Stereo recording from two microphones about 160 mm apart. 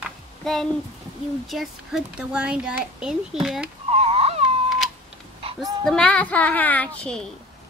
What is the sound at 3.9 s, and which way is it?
Baby cry, 40° right (ahead or behind).